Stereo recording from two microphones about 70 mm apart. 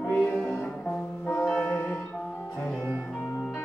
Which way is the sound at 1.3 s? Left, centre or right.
Centre.